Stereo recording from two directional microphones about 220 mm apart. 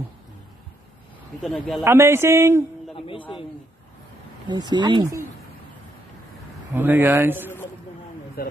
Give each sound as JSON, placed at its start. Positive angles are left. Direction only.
{"t": 1.4, "sound": "speech", "side_deg": 0}
{"t": 1.9, "sound": "speech", "side_deg": -10}
{"t": 3.1, "sound": "a man's voice", "side_deg": 25}
{"t": 4.5, "sound": "speech", "side_deg": -20}
{"t": 6.7, "sound": "speech", "side_deg": -10}
{"t": 8.4, "sound": "speech", "side_deg": 40}